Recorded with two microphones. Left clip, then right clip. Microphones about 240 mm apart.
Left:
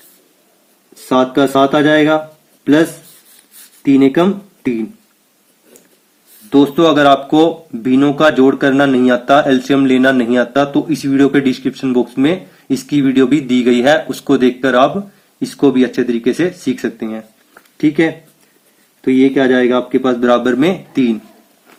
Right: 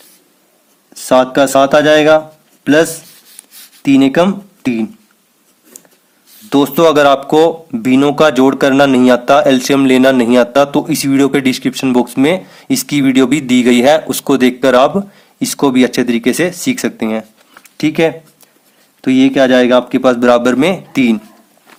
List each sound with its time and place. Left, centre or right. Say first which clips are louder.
1.0 s speech: right 3 dB; right
3.8 s speech: right 1 dB; right
6.5 s speech: right 1 dB; right